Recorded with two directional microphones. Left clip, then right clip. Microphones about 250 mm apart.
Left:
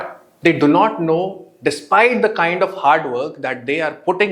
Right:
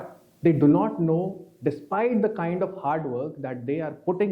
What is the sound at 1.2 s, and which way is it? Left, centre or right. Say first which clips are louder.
Speech: left 8 dB; left.